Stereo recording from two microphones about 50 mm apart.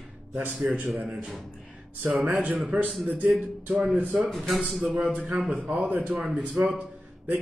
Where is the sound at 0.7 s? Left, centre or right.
Right.